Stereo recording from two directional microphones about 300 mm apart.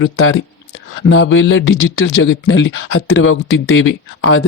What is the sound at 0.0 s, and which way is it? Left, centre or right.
Speech, left.